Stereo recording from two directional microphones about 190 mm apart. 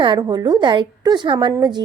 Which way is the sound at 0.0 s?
25° right (ahead or behind).